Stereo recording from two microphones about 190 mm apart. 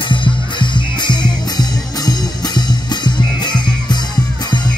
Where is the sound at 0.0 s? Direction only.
25° left (ahead or behind).